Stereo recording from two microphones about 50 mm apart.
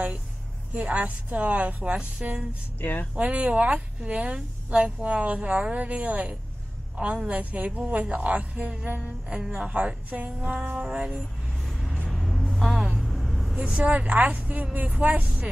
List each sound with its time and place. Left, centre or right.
0.7 s speech: right
2.8 s speech: left
3.2 s speech: right
8.8 s music: right
9.3 s speech: centre
11.6 s vehicle: centre
12.1 s music: centre
13.0 s vehicle: centre
13.6 s speech: right